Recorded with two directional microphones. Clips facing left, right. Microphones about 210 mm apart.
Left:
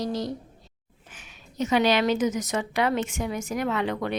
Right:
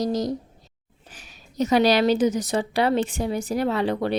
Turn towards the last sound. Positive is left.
turn(degrees=-35)  # may be behind; listen again after turning